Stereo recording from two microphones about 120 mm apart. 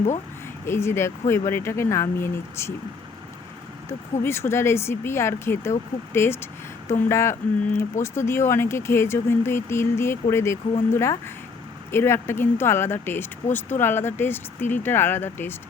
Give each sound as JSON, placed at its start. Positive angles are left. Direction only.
{"t": 0.6, "sound": "speech", "side_deg": 20}
{"t": 3.8, "sound": "a woman's voice", "side_deg": 20}